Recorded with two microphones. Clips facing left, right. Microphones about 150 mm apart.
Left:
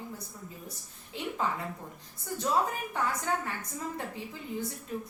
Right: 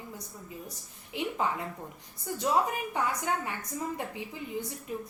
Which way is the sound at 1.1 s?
15° right (ahead or behind).